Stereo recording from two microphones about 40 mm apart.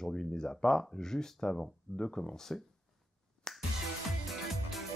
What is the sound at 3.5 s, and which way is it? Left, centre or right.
Music, centre.